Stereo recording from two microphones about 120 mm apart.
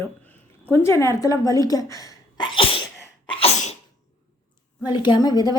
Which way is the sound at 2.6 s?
50° left (ahead or behind).